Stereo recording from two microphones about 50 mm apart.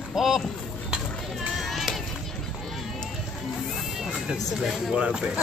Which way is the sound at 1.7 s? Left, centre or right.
Centre.